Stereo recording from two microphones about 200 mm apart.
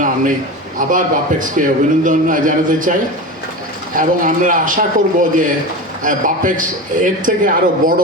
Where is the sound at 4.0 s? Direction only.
40° right (ahead or behind).